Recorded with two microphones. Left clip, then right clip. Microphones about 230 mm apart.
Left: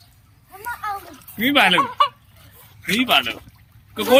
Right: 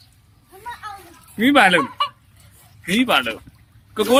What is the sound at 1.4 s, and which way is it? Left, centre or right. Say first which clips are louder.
Speech: right 2 dB; centre.